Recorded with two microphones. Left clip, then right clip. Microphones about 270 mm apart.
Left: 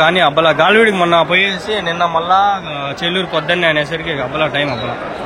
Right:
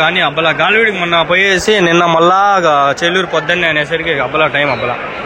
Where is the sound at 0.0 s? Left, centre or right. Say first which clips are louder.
Left 1 dB; centre.